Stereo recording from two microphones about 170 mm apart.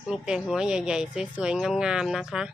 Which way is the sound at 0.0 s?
5° right (ahead or behind).